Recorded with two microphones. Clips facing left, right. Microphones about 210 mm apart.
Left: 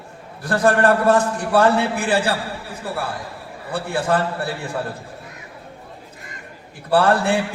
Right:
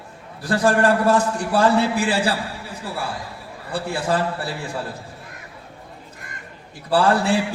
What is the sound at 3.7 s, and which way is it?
Speech, 55° left (ahead or behind).